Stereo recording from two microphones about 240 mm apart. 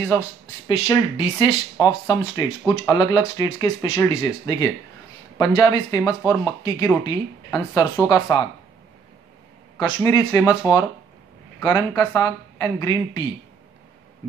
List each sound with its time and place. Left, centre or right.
0.1 s speech: centre
9.8 s speech: centre
11.6 s speech: centre